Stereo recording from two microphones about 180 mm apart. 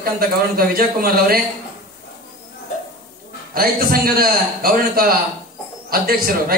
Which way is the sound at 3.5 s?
55° right (ahead or behind).